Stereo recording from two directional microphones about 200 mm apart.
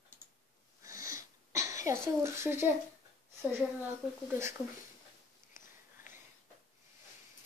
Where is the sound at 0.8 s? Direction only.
15° right (ahead or behind).